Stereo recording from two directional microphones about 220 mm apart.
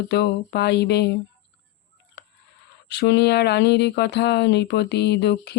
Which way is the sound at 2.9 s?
50° left (ahead or behind).